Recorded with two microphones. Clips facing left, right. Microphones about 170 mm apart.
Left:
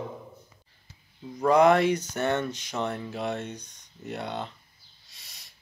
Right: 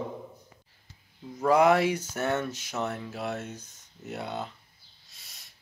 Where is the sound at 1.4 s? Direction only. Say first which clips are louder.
Left 2 dB; 5° right (ahead or behind).